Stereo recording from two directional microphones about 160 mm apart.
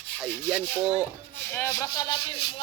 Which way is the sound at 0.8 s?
35° right (ahead or behind).